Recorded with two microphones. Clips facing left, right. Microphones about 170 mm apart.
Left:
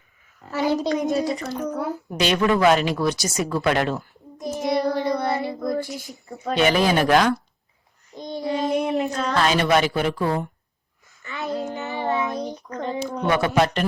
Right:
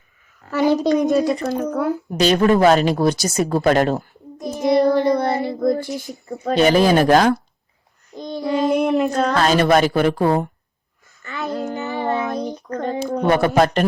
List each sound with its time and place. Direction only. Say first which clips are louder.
1.2 s speech: right 5 dB; 55° right (ahead or behind)
2.1 s speech: right 5 dB; 40° right (ahead or behind)
4.6 s speech: right 7 dB; 55° right (ahead or behind)
6.4 s speech: right 5 dB; 40° right (ahead or behind)
8.4 s speech: right 5 dB; 55° right (ahead or behind)
11.2 s child singing: right 2 dB; 45° right (ahead or behind)
12.7 s speech: right 5 dB; 50° right (ahead or behind)